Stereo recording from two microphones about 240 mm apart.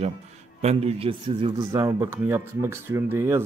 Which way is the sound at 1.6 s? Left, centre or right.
Centre.